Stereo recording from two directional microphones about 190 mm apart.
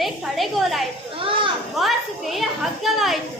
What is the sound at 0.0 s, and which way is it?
Speech, centre (ahead or behind).